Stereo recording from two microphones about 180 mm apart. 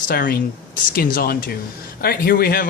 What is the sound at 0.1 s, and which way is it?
A man's voice, 55° left (ahead or behind).